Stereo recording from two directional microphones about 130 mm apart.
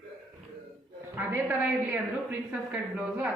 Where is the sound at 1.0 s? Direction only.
20° right (ahead or behind).